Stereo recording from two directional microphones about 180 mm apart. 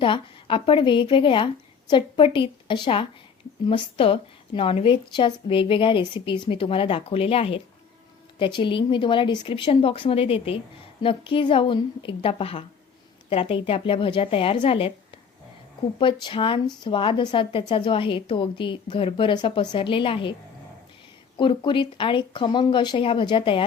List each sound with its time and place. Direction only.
0.0 s a woman's voice: 30° left (ahead or behind)
16.2 s a woman's voice: 30° left (ahead or behind)
21.3 s a woman's voice: 25° left (ahead or behind)